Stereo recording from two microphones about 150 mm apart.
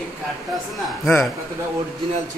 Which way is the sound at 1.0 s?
Centre (ahead or behind).